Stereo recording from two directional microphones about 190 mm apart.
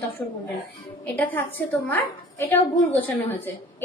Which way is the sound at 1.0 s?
10° left (ahead or behind).